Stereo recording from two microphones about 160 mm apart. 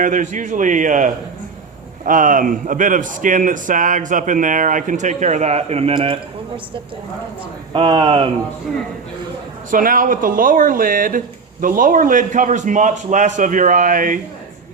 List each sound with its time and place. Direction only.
0.0 s speech: 55° right (ahead or behind); by 6.1 s 35° right (ahead or behind)
7.7 s speech: 30° right (ahead or behind)
9.6 s speech: 60° right (ahead or behind)